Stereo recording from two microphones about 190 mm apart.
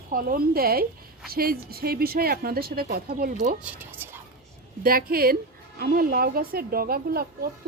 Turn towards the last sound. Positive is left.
turn(degrees=-55)  # may be behind; listen again after turning